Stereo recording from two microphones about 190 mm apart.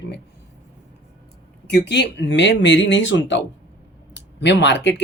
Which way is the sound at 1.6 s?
60° left (ahead or behind).